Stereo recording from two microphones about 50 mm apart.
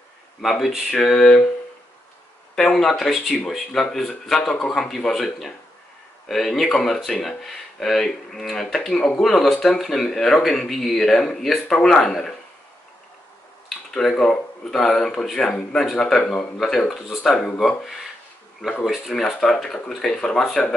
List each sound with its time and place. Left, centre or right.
0.4 s speech: centre
0.9 s speech: centre
2.5 s speech: centre
14.1 s speech: centre
16.9 s speech: centre
17.2 s speech: centre
19.0 s speech: centre